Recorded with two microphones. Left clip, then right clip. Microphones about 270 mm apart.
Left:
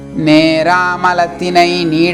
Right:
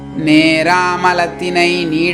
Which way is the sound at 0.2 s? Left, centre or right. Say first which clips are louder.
Left 1 dB; left.